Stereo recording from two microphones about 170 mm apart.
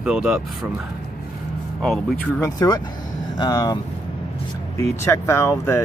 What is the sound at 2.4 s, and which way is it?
Speech, 20° left (ahead or behind).